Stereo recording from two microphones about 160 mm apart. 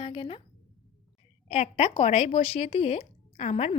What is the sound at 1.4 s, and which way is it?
A woman's voice, 45° left (ahead or behind).